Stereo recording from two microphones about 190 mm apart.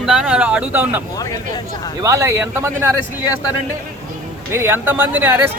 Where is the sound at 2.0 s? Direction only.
15° right (ahead or behind).